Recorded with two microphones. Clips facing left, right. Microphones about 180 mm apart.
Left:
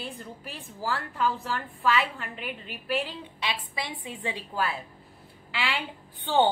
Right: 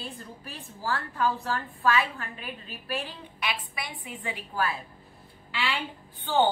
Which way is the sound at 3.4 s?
25° left (ahead or behind).